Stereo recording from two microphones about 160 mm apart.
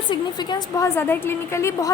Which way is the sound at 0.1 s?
25° left (ahead or behind).